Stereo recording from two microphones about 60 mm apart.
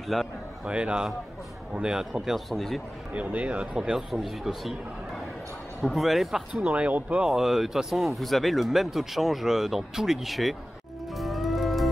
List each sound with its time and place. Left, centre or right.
0.1 s speech: centre
0.7 s a man's voice: centre
3.1 s speech: right
4.1 s speech: centre
6.7 s speech: right
7.2 s speech: centre
11.1 s music: centre